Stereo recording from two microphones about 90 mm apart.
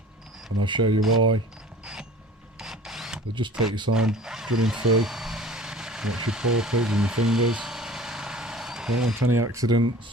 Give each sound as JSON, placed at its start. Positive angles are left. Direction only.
{"t": 0.6, "sound": "speech", "side_deg": -60}
{"t": 1.8, "sound": "a sound", "side_deg": -5}
{"t": 3.7, "sound": "speech", "side_deg": -55}
{"t": 3.9, "sound": "drill", "side_deg": -5}
{"t": 9.2, "sound": "speech", "side_deg": -30}